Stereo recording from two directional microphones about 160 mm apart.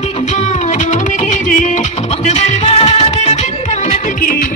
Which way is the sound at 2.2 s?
45° left (ahead or behind).